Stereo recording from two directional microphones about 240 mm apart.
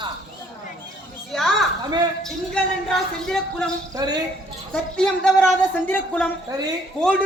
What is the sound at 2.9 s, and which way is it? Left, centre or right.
Speech, centre.